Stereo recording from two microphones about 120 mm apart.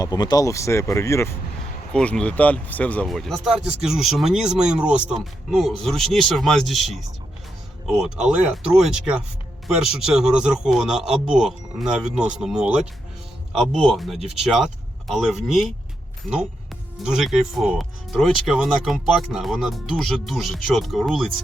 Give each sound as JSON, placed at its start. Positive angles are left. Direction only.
{"t": 0.0, "sound": "speech", "side_deg": 35}
{"t": 1.9, "sound": "speech", "side_deg": 5}
{"t": 10.2, "sound": "speech", "side_deg": -5}
{"t": 17.0, "sound": "speech", "side_deg": -5}